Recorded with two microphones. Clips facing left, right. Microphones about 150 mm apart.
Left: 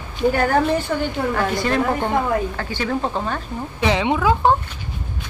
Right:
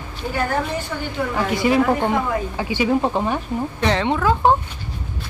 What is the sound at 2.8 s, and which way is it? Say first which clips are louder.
Speech: right 4 dB; 15° right (ahead or behind).